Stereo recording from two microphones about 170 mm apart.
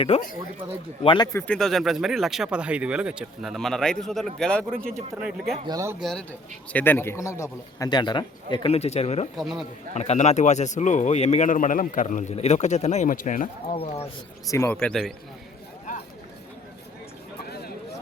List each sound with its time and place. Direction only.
0.1 s speech: 40° left (ahead or behind)
1.0 s speech: 25° left (ahead or behind)
1.4 s speech: 5° left (ahead or behind)
4.8 s speech: 55° right (ahead or behind)
5.1 s speech: 5° right (ahead or behind)
5.6 s speech: 20° right (ahead or behind)
6.0 s speech: centre (ahead or behind)
6.7 s speech: 10° left (ahead or behind); by 9.3 s 40° left (ahead or behind)
9.4 s speech: centre (ahead or behind)
9.9 s speech: 40° left (ahead or behind)
13.7 s speech: 40° left (ahead or behind)
14.5 s a man's voice: 15° left (ahead or behind)
14.8 s speech: 5° left (ahead or behind)
15.9 s a sound: 50° left (ahead or behind)